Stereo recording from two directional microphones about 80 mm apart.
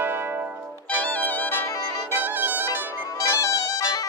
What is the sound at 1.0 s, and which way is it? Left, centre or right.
Music, centre.